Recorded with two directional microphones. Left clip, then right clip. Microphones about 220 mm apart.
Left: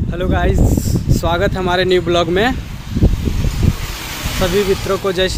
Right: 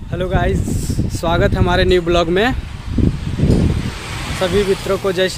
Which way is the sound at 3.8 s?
45° left (ahead or behind).